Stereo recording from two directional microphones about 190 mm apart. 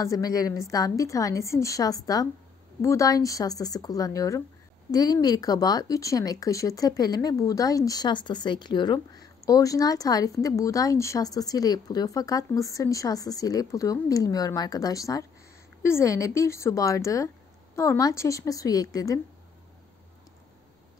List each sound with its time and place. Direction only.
0.0 s a woman's voice: 15° left (ahead or behind)